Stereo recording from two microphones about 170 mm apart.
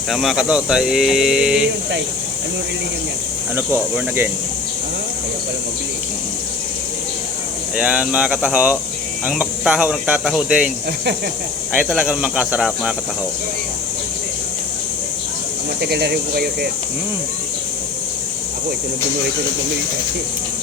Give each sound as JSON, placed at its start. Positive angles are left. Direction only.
{"t": 0.1, "sound": "speech", "side_deg": 0}
{"t": 3.5, "sound": "speech", "side_deg": -15}
{"t": 7.8, "sound": "speech", "side_deg": -5}
{"t": 11.7, "sound": "speech", "side_deg": -5}
{"t": 15.8, "sound": "speech", "side_deg": -75}